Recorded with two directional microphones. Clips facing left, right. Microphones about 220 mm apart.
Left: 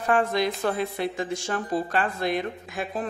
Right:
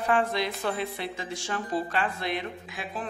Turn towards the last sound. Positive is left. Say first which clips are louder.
# left 5 dB
turn(degrees=45)  # may be behind; listen again after turning